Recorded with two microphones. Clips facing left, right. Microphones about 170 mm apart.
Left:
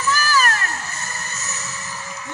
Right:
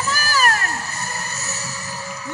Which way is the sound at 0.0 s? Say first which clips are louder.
Left 1 dB; 40° right (ahead or behind).